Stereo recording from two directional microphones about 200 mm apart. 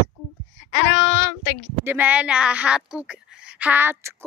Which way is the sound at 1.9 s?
10° right (ahead or behind).